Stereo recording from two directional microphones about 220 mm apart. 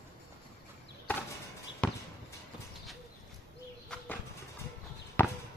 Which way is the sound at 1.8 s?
5° left (ahead or behind).